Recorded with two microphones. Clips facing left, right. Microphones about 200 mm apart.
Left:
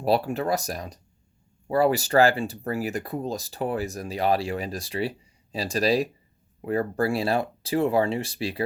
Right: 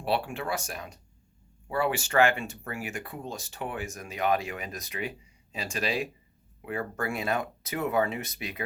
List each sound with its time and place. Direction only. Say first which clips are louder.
0.0 s speech: left 6 dB; 40° left (ahead or behind)